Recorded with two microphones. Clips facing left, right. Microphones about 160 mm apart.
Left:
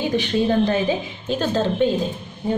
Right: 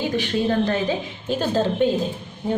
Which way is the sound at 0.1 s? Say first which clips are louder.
Left 2 dB; 15° left (ahead or behind).